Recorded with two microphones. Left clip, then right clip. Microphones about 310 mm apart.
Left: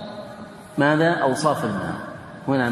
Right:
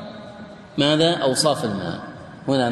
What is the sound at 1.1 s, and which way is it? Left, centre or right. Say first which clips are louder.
Speech: right 1 dB; centre.